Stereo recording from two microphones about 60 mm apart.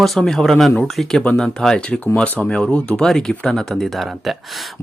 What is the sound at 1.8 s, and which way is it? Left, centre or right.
Speech, left.